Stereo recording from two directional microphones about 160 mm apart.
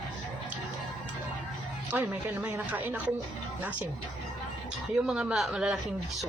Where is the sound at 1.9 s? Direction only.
10° right (ahead or behind).